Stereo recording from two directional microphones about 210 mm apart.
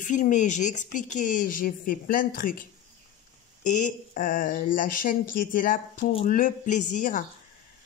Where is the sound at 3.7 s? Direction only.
35° left (ahead or behind).